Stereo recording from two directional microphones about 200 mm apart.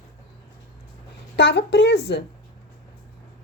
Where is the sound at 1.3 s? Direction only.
60° left (ahead or behind).